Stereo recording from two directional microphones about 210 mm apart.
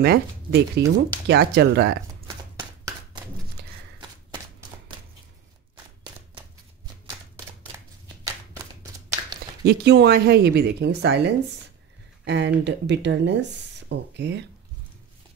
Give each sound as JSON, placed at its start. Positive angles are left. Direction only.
{"t": 0.0, "sound": "a woman's voice", "side_deg": -45}
{"t": 9.2, "sound": "a sound", "side_deg": -20}
{"t": 9.7, "sound": "a woman's voice", "side_deg": -50}